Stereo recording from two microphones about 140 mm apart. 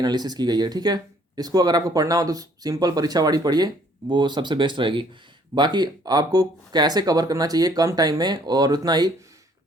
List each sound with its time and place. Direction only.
0.0 s speech: 30° right (ahead or behind)